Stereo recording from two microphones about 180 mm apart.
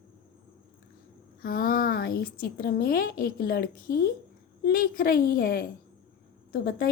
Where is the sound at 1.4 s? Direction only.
50° left (ahead or behind).